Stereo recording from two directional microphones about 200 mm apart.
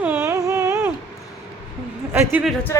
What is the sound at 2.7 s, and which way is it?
Speech, 15° left (ahead or behind).